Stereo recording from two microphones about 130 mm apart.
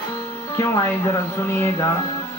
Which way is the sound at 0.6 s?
20° left (ahead or behind).